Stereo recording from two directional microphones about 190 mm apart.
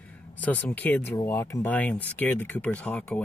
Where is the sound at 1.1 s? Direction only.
15° left (ahead or behind).